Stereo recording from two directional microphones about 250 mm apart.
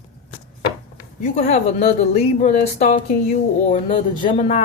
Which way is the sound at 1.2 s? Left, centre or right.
Left.